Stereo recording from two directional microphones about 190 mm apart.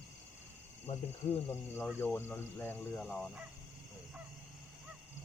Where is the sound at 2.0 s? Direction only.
10° left (ahead or behind).